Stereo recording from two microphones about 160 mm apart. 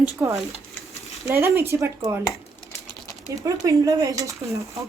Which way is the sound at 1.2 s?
15° right (ahead or behind).